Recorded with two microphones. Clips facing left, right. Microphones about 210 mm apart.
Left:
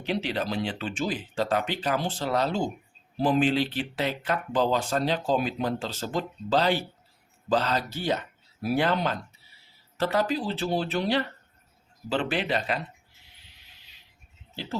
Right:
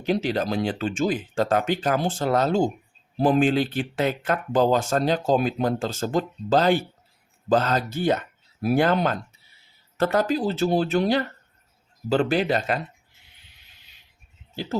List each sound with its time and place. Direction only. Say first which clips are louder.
0.0 s speech: right 5 dB; 45° right (ahead or behind)
14.5 s speech: right 5 dB; 45° right (ahead or behind)